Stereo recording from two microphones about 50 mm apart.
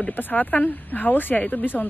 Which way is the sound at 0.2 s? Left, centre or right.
Left.